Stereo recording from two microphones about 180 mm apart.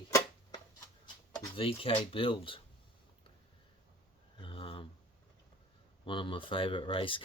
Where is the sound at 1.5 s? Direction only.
30° left (ahead or behind).